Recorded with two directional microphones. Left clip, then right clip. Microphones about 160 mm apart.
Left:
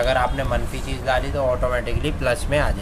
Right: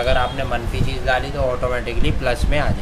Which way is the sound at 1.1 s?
25° left (ahead or behind).